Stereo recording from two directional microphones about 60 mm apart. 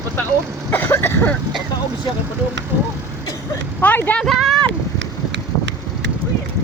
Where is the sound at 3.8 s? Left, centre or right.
Left.